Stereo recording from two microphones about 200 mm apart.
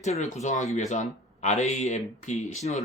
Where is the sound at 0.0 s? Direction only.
35° left (ahead or behind).